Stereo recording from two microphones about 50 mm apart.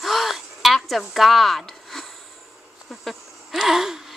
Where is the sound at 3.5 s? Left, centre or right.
Centre.